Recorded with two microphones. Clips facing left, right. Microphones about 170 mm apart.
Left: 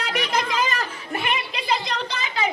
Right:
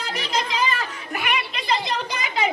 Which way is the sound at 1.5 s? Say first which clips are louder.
Right 1 dB; 10° left (ahead or behind).